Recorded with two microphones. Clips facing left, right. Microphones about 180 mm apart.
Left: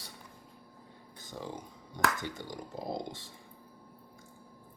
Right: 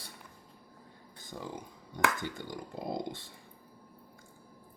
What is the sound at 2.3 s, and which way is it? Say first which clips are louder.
Speech: even; 55° right (ahead or behind).